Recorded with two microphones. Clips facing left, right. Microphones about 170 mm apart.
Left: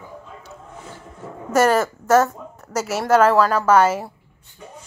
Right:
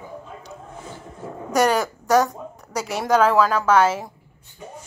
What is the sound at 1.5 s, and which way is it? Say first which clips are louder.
A woman's voice: left 2 dB; centre (ahead or behind).